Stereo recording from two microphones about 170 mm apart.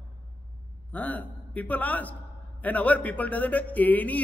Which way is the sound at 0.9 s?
10° left (ahead or behind).